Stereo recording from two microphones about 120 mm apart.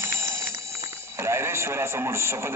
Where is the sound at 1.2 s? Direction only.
20° right (ahead or behind).